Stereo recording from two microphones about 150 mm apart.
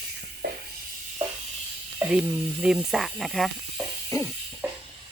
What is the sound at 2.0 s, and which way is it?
Sizzle, 15° right (ahead or behind).